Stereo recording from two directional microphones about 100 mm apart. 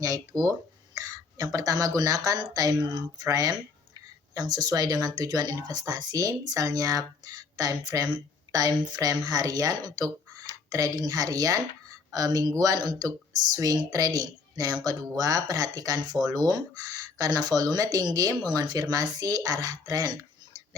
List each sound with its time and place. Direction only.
0.0 s speech: 35° right (ahead or behind)
1.5 s a woman's voice: 35° right (ahead or behind)